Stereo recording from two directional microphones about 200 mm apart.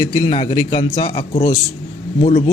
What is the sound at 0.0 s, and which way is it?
A man's voice, 20° left (ahead or behind).